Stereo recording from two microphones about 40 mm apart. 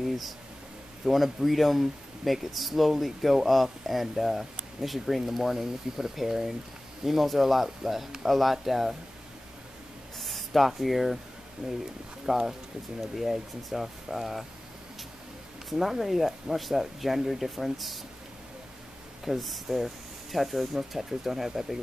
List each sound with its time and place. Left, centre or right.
0.0 s a sound: centre
1.0 s speech: centre
10.1 s speech: centre
11.6 s speech: centre
15.7 s speech: centre
19.2 s speech: centre